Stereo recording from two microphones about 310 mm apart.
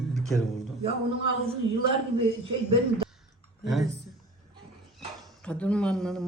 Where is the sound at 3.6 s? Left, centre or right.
Centre.